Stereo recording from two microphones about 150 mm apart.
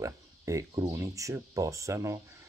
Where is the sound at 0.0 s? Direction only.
20° right (ahead or behind).